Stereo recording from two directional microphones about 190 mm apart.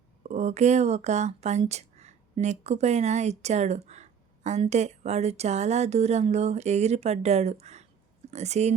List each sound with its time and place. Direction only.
0.2 s speech: 35° right (ahead or behind)